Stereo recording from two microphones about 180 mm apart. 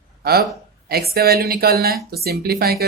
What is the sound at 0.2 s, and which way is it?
Speech, 60° right (ahead or behind).